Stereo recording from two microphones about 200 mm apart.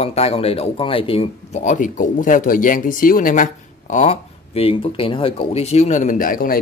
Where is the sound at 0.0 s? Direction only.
30° left (ahead or behind).